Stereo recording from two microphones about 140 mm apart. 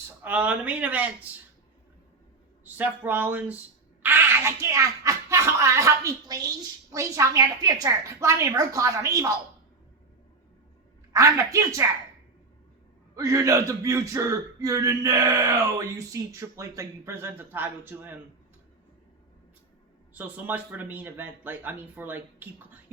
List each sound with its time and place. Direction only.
0.2 s speech: 10° right (ahead or behind)
2.6 s speech: 15° right (ahead or behind)
11.1 s speech: 25° right (ahead or behind)
13.1 s speech: 20° right (ahead or behind)
20.1 s speech: 10° right (ahead or behind)